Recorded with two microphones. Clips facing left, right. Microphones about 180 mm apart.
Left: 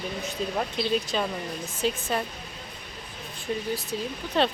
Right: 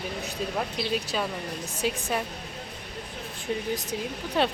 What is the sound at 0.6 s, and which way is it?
Speech, 5° right (ahead or behind).